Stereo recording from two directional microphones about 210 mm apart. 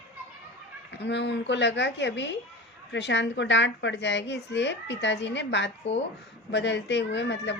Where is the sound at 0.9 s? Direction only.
55° left (ahead or behind).